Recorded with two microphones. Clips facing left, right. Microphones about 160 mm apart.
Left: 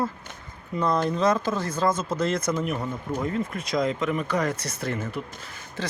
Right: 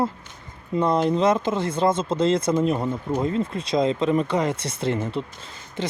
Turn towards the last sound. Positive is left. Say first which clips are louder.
# right 3 dB
turn(degrees=-20)  # may be behind; listen again after turning